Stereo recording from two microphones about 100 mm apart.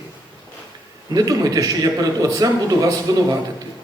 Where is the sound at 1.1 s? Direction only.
40° right (ahead or behind).